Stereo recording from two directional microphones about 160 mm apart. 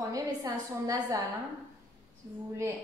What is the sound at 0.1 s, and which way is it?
A woman's voice, 25° right (ahead or behind).